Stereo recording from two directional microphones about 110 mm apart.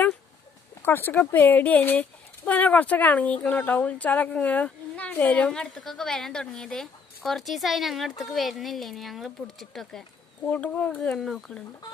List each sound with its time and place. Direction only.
0.8 s speech: 20° left (ahead or behind); by 10.0 s centre (ahead or behind)
10.4 s speech: 15° left (ahead or behind)